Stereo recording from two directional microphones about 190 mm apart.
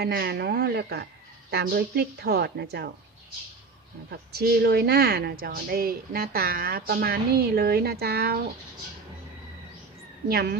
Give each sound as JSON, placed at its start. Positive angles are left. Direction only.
{"t": 0.0, "sound": "speech", "side_deg": -55}
{"t": 4.1, "sound": "speech", "side_deg": -55}
{"t": 10.2, "sound": "a woman's voice", "side_deg": -55}